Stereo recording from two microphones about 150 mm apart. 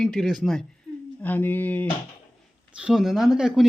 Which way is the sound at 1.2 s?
10° left (ahead or behind).